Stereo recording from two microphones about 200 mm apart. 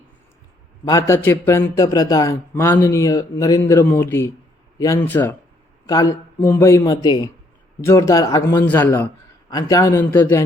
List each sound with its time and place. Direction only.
0.9 s speech: 15° left (ahead or behind)